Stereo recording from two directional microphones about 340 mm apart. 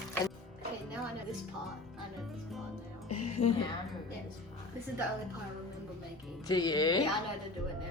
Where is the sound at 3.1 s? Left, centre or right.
Centre.